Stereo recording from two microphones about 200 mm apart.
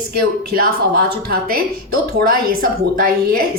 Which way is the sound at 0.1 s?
50° right (ahead or behind).